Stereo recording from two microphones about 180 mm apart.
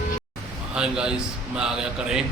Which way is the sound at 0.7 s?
5° right (ahead or behind).